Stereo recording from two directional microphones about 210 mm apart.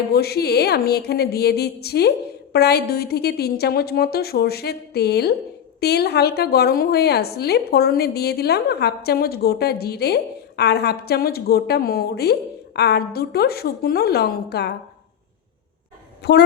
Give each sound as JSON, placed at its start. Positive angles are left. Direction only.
{"t": 0.1, "sound": "a woman's voice", "side_deg": 50}